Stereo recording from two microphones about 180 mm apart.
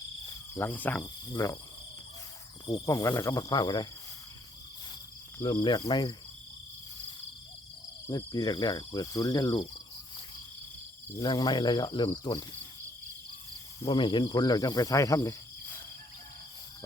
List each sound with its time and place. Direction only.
0.5 s cricket: 10° left (ahead or behind)
2.6 s speech: 20° left (ahead or behind)
5.6 s speech: 25° left (ahead or behind)
8.0 s speech: 20° left (ahead or behind)
11.1 s speech: 25° left (ahead or behind)
13.8 s speech: 25° left (ahead or behind)